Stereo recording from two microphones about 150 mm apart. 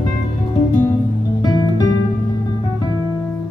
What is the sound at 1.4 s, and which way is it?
Music, 25° left (ahead or behind).